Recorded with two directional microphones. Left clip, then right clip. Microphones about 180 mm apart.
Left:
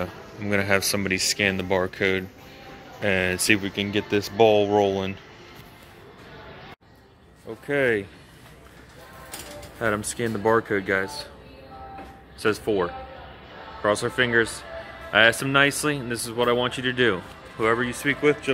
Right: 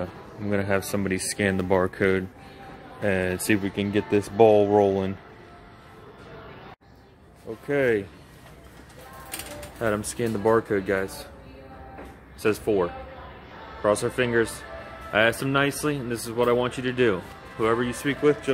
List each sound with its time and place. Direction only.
0.0 s a man's voice: centre (ahead or behind)
1.1 s speech: 25° right (ahead or behind)
3.0 s speech: 10° right (ahead or behind)
7.6 s speech: centre (ahead or behind)
9.8 s speech: centre (ahead or behind)
12.4 s speech: centre (ahead or behind)